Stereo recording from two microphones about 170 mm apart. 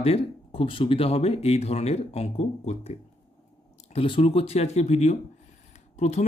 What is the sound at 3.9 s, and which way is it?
Speech, 30° left (ahead or behind).